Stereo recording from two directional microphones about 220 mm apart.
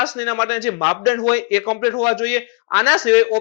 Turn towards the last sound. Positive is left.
turn(degrees=15)  # may be behind; listen again after turning